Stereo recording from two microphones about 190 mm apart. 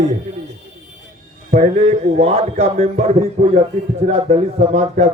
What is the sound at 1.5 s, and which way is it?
Speech, 30° right (ahead or behind).